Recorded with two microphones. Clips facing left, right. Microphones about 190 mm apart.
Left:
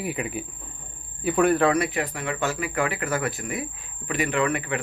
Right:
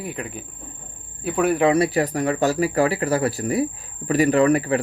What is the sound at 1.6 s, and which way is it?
Speech, 30° right (ahead or behind).